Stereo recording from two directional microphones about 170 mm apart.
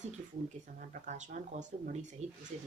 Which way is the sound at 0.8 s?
45° right (ahead or behind).